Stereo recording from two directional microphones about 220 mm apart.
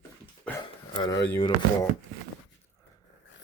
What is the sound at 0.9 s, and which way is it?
Speech, 20° left (ahead or behind).